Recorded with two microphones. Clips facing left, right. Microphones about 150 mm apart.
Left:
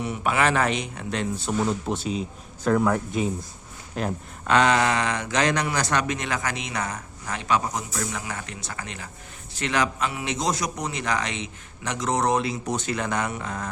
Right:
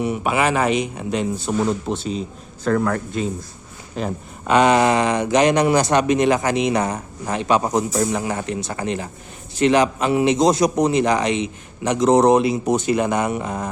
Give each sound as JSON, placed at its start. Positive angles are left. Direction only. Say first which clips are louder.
{"t": 0.0, "sound": "speech", "louder": "right 4 dB", "side_deg": -10}
{"t": 1.9, "sound": "speech", "louder": "right 3 dB", "side_deg": 10}
{"t": 4.4, "sound": "a man's voice", "louder": "right 5 dB", "side_deg": -10}